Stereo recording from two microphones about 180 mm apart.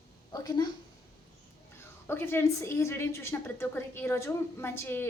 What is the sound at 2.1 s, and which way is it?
A woman's voice, 10° left (ahead or behind).